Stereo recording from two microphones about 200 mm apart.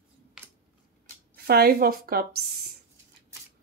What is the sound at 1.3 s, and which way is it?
A woman's voice, 50° right (ahead or behind).